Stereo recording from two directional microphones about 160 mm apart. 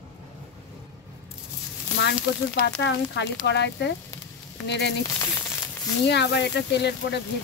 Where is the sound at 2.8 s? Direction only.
90° left.